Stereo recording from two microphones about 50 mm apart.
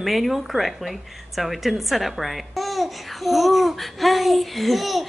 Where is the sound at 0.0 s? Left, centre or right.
Centre.